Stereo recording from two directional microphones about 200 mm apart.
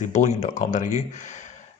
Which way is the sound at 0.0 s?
35° left (ahead or behind).